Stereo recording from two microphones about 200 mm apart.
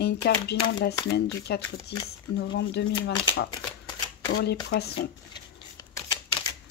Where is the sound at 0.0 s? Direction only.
55° left (ahead or behind).